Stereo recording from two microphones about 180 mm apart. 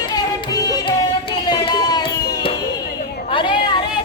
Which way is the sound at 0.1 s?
20° left (ahead or behind).